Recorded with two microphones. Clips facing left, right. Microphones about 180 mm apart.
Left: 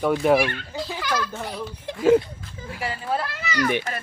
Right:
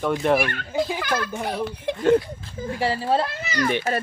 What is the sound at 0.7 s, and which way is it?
Speech, 20° right (ahead or behind).